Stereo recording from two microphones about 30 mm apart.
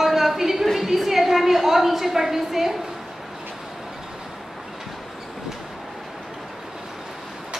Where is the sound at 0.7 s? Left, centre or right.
Centre.